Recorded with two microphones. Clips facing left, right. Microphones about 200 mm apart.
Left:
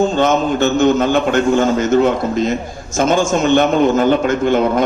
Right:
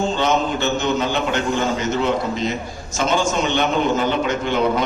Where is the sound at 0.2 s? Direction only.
50° left (ahead or behind).